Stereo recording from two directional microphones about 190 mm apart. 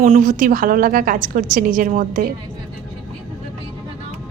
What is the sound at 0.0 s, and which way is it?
A woman's voice, 45° right (ahead or behind).